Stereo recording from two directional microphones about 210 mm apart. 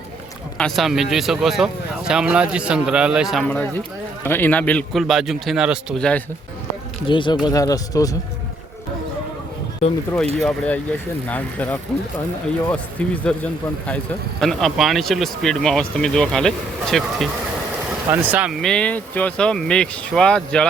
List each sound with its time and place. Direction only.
0.6 s speech: centre (ahead or behind)
7.1 s speech: 20° left (ahead or behind)
10.4 s speech: 5° left (ahead or behind)